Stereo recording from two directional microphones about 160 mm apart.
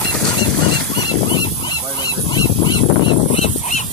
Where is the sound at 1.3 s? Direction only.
30° left (ahead or behind).